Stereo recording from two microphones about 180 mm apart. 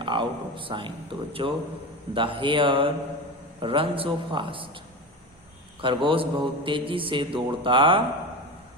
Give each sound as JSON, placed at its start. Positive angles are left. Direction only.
{"t": 0.0, "sound": "a man's voice", "side_deg": -25}
{"t": 5.8, "sound": "a man's voice", "side_deg": -25}